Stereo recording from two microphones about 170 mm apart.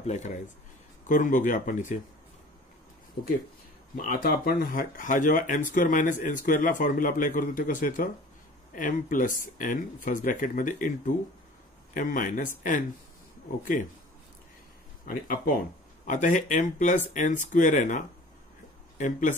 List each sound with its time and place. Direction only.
0.0 s speech: 45° left (ahead or behind)
3.9 s speech: 55° left (ahead or behind)
15.0 s speech: 55° left (ahead or behind)